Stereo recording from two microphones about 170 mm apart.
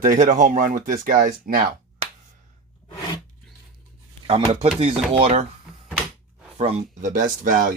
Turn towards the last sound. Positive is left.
turn(degrees=-55)  # may be behind; listen again after turning